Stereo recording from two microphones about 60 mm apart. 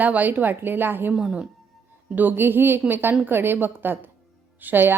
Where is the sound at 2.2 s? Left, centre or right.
Right.